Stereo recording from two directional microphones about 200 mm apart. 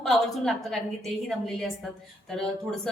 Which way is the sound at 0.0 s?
Centre (ahead or behind).